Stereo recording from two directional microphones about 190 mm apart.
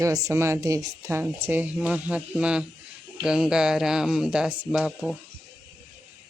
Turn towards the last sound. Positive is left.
turn(degrees=0)  # may be behind; listen again after turning